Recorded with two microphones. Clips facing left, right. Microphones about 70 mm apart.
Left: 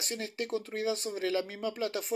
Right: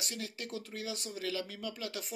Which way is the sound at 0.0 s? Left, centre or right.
Left.